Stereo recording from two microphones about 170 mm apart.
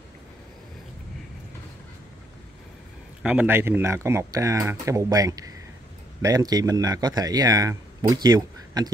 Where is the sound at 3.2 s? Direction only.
5° right (ahead or behind).